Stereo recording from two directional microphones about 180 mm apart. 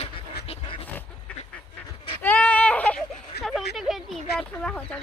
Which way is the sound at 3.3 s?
65° left (ahead or behind).